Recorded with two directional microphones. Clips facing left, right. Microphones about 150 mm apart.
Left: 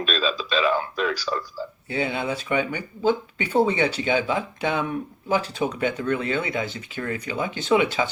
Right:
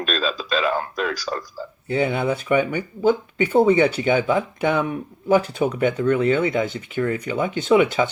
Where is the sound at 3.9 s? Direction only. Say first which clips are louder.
Right 4 dB; 50° right (ahead or behind).